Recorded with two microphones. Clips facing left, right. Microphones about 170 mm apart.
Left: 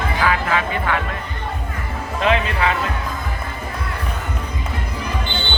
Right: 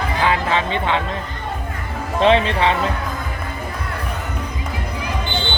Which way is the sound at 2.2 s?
30° right (ahead or behind).